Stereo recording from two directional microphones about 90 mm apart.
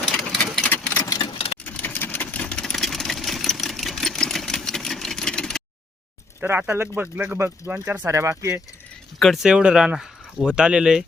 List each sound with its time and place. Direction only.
0.2 s a sound: 5° left (ahead or behind)
0.9 s tick-tock: 35° left (ahead or behind)
1.2 s sewing machine: 75° left (ahead or behind)
1.6 s sewing machine: 20° left (ahead or behind)
6.4 s speech: 25° right (ahead or behind)
8.1 s speech: 30° right (ahead or behind)
9.1 s speech: centre (ahead or behind)